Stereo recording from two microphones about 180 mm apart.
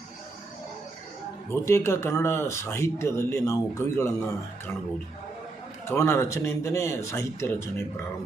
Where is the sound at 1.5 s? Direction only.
15° left (ahead or behind).